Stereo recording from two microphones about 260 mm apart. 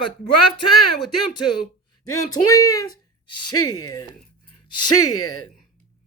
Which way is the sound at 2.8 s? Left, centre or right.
Left.